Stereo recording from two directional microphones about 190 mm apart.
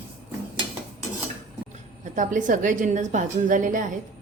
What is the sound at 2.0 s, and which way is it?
A woman's voice, 40° right (ahead or behind).